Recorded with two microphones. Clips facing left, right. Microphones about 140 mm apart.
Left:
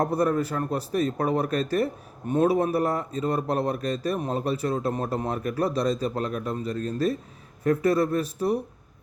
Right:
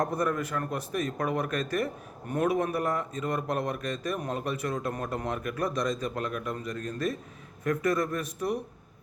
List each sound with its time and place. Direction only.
0.0 s a man's voice: 35° left (ahead or behind)